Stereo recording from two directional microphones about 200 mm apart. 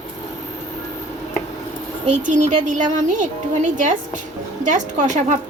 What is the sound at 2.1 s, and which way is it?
A woman's voice, 40° right (ahead or behind).